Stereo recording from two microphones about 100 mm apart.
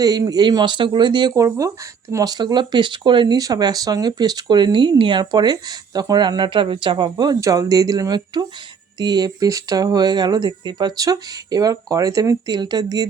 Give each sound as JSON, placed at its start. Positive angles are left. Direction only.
{"t": 0.0, "sound": "speech", "side_deg": -40}
{"t": 1.4, "sound": "speech", "side_deg": -35}
{"t": 3.3, "sound": "speech", "side_deg": -40}
{"t": 5.2, "sound": "speech", "side_deg": -45}
{"t": 12.5, "sound": "speech", "side_deg": -45}